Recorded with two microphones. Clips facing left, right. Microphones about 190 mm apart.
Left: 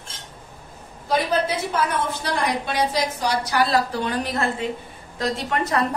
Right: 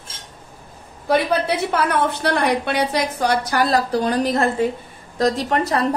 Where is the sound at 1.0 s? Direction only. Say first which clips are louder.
Right 3 dB; 65° right (ahead or behind).